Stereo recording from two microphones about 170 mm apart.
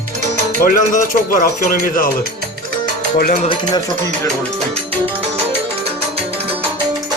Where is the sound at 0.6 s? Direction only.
55° left (ahead or behind).